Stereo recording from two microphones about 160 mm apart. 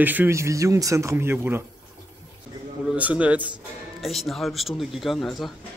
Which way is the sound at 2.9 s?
10° right (ahead or behind).